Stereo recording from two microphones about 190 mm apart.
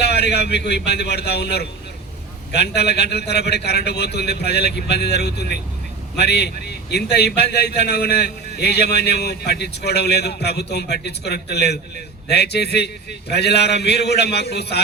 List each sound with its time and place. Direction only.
0.0 s a man's voice: 60° left (ahead or behind)